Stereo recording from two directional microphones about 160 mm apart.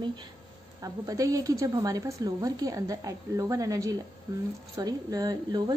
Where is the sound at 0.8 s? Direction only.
20° right (ahead or behind).